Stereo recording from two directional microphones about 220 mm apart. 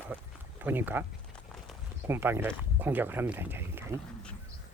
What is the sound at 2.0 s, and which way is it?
Speech, 10° right (ahead or behind).